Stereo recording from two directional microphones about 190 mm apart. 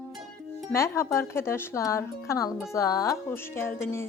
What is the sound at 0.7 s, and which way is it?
Speech, 15° left (ahead or behind).